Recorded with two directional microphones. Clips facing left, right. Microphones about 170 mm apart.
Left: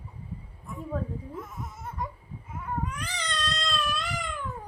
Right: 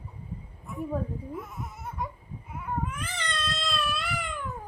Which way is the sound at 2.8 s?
5° right (ahead or behind).